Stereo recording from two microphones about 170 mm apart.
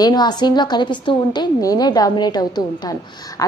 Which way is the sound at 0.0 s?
25° left (ahead or behind).